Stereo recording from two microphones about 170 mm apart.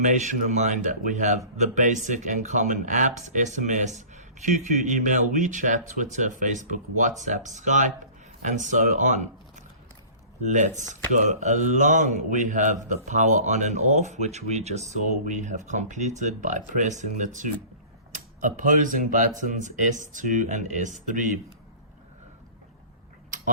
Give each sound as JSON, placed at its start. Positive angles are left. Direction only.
{"t": 0.0, "sound": "speech", "side_deg": -45}
{"t": 10.4, "sound": "speech", "side_deg": -45}